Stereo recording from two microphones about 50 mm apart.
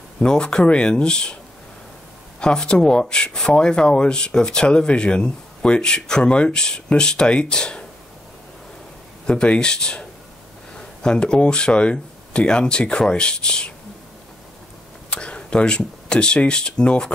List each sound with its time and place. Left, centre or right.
0.2 s speech: centre
2.4 s speech: centre
9.2 s speech: centre
15.0 s speech: left